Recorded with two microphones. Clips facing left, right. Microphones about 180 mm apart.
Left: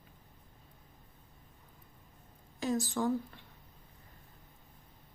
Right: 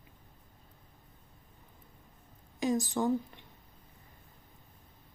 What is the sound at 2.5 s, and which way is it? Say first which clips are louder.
Speech: right 3 dB; 15° right (ahead or behind).